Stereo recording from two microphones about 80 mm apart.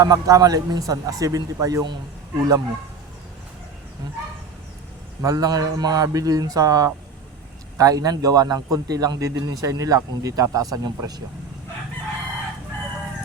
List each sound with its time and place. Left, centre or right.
0.0 s a man's voice: right
5.2 s a man's voice: right